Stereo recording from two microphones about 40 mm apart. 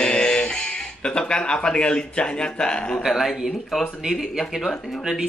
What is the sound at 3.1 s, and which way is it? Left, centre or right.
Speech, centre.